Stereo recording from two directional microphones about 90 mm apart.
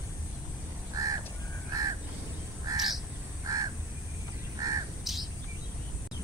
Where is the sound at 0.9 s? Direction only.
40° right (ahead or behind).